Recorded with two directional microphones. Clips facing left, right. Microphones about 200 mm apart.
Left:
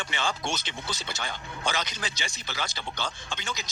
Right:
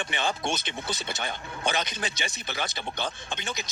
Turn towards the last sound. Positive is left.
turn(degrees=-20)  # may be behind; listen again after turning